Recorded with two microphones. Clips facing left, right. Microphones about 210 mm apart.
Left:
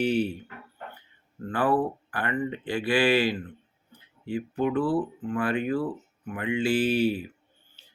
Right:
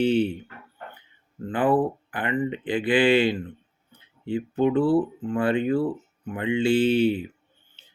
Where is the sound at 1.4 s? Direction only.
20° right (ahead or behind).